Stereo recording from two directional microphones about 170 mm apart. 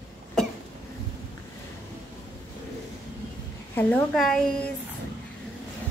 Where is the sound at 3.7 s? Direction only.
10° left (ahead or behind).